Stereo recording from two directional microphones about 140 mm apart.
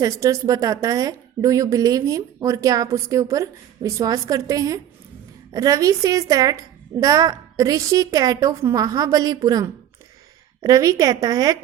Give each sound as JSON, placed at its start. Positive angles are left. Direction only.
{"t": 0.0, "sound": "a woman's voice", "side_deg": -25}